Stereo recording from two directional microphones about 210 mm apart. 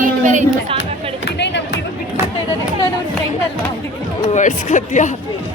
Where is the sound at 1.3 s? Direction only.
55° left (ahead or behind).